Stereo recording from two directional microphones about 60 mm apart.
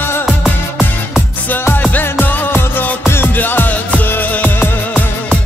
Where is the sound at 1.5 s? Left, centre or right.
Left.